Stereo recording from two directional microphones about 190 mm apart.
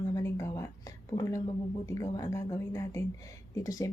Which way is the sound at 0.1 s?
15° left (ahead or behind).